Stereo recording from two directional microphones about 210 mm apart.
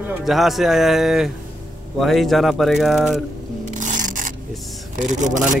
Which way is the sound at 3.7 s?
35° right (ahead or behind).